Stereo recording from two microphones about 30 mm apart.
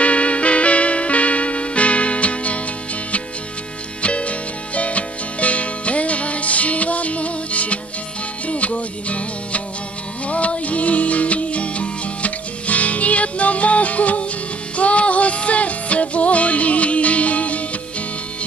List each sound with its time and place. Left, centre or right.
0.0 s music: left
4.0 s music: left